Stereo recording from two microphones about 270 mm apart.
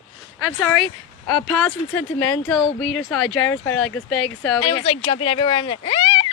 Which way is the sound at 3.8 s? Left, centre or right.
Centre.